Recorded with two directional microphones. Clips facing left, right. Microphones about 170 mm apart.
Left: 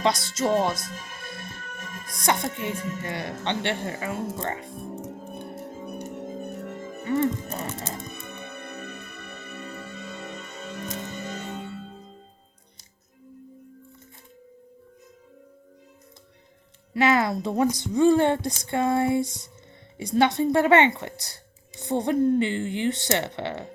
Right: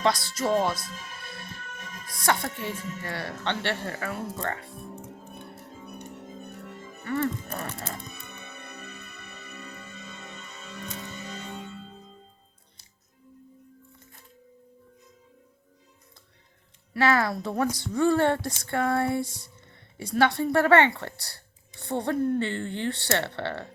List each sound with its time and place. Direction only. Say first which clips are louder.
0.0 s speech: left 2 dB; 20° left (ahead or behind)
0.8 s music: left 3 dB; 45° left (ahead or behind)
2.2 s speech: left 2 dB; 20° left (ahead or behind)
5.3 s organ: left 7 dB; 45° left (ahead or behind)
7.0 s music: left 4 dB; 15° left (ahead or behind)
7.5 s speech: left 2 dB; 20° left (ahead or behind)
7.9 s music: left 5 dB; 45° left (ahead or behind); by 9.6 s 65° left (ahead or behind)
9.6 s music: left 6 dB; 40° left (ahead or behind)
16.9 s a woman's voice: left 2 dB; 20° left (ahead or behind)